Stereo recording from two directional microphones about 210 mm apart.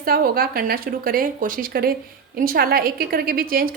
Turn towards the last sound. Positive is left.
turn(degrees=-45)  # may be behind; listen again after turning